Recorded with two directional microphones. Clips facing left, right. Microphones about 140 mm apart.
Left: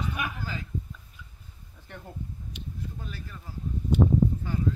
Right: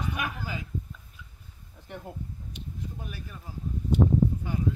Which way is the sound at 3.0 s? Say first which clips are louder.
Even; 15° right (ahead or behind).